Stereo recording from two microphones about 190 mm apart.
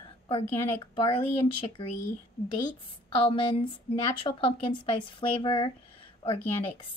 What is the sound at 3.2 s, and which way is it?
A woman's voice, 25° left (ahead or behind).